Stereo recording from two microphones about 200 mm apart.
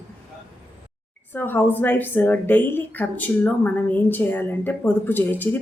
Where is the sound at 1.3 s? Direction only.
10° left (ahead or behind).